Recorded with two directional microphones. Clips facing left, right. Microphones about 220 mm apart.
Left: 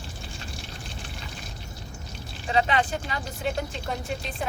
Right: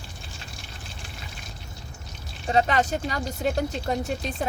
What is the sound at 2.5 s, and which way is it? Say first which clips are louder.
Speech: right 2 dB; 40° right (ahead or behind).